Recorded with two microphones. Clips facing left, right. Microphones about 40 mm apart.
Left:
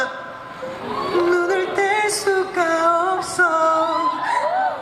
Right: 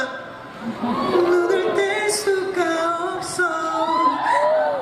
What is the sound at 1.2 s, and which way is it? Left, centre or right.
Music, left.